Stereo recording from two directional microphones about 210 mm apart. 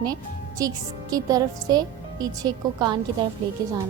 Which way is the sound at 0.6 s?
15° right (ahead or behind).